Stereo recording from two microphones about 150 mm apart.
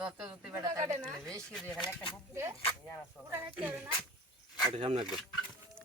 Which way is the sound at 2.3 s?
15° right (ahead or behind).